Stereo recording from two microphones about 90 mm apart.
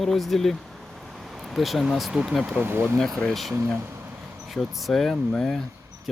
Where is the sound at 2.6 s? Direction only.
25° right (ahead or behind).